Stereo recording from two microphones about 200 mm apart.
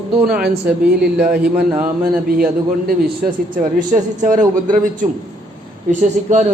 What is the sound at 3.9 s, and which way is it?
A man's voice, 40° right (ahead or behind).